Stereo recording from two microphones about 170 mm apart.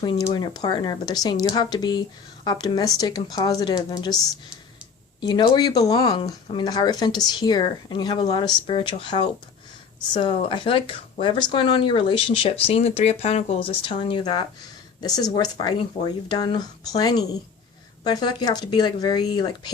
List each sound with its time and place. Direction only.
0.0 s speech: 25° left (ahead or behind)
5.2 s speech: 25° left (ahead or behind)